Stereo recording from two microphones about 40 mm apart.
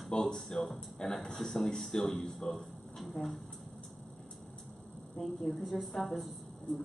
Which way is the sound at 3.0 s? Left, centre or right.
Centre.